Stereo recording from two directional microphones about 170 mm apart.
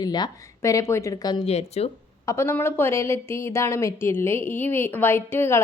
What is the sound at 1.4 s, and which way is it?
Speech, 40° left (ahead or behind).